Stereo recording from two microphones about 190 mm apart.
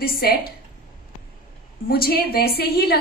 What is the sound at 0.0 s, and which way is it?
Speech, 55° left (ahead or behind).